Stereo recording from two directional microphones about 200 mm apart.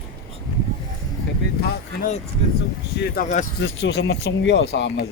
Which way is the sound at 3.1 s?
40° left (ahead or behind).